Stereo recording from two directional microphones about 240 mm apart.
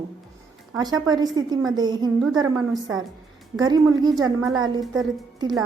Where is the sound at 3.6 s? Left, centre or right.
Centre.